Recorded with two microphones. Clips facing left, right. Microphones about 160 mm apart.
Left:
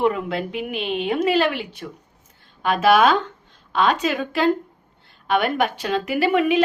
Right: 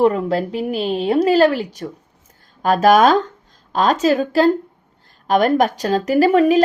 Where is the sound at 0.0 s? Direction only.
35° right (ahead or behind).